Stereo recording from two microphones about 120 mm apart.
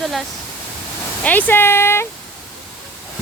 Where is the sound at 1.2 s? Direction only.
15° left (ahead or behind).